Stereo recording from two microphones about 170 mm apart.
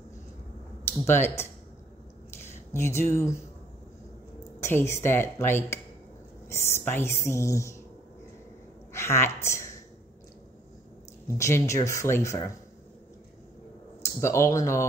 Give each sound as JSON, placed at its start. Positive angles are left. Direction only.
{"t": 1.0, "sound": "speech", "side_deg": 15}
{"t": 4.6, "sound": "speech", "side_deg": 15}
{"t": 8.9, "sound": "a woman's voice", "side_deg": 15}
{"t": 11.3, "sound": "speech", "side_deg": 15}
{"t": 14.0, "sound": "speech", "side_deg": 15}